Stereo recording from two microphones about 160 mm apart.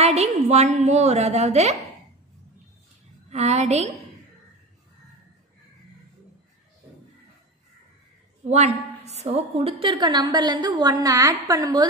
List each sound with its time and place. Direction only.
0.0 s a woman's voice: 40° right (ahead or behind)
3.3 s a woman's voice: 45° right (ahead or behind)
8.5 s a woman's voice: 45° right (ahead or behind); by 11.9 s 25° right (ahead or behind)